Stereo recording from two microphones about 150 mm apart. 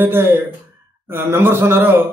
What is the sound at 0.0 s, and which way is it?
A man's voice, 15° right (ahead or behind).